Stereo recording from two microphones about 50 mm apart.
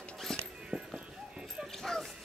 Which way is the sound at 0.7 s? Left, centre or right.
Right.